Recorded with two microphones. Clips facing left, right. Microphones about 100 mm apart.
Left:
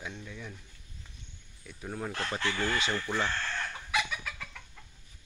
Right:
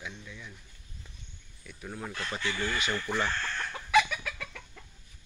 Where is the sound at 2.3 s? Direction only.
80° left.